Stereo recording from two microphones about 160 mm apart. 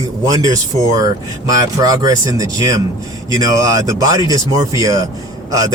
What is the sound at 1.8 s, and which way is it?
Speech, 25° right (ahead or behind).